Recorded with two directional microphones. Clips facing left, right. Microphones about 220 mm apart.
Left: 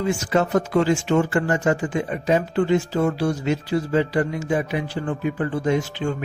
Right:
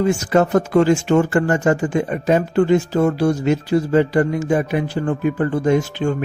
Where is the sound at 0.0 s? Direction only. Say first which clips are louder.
Right 5 dB; 50° right (ahead or behind).